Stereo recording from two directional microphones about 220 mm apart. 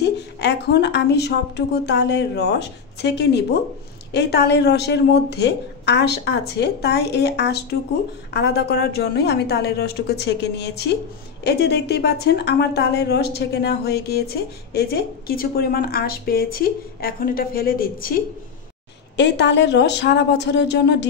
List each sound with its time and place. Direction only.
0.0 s a woman's voice: 50° left (ahead or behind)
19.1 s a woman's voice: 50° left (ahead or behind)